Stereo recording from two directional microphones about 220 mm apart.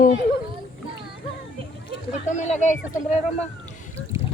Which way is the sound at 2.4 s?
35° left (ahead or behind).